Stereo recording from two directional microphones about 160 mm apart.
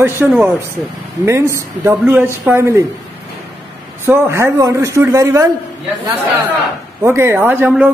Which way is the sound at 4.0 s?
15° right (ahead or behind).